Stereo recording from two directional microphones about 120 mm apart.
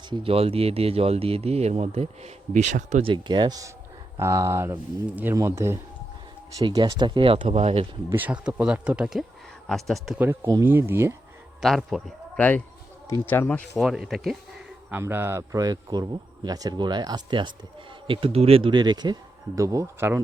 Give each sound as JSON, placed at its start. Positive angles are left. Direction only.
{"t": 0.1, "sound": "speech", "side_deg": -50}
{"t": 3.0, "sound": "speech", "side_deg": -45}
{"t": 6.6, "sound": "speech", "side_deg": -30}
{"t": 8.1, "sound": "speech", "side_deg": -10}
{"t": 10.2, "sound": "speech", "side_deg": -20}
{"t": 11.6, "sound": "speech", "side_deg": 0}
{"t": 12.4, "sound": "speech", "side_deg": 15}
{"t": 13.7, "sound": "speech", "side_deg": 0}
{"t": 14.8, "sound": "speech", "side_deg": -15}
{"t": 18.1, "sound": "speech", "side_deg": -50}